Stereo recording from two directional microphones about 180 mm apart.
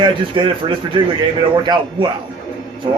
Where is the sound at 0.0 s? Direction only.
25° right (ahead or behind).